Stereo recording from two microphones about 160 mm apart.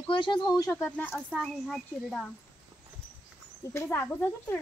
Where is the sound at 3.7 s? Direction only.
15° left (ahead or behind).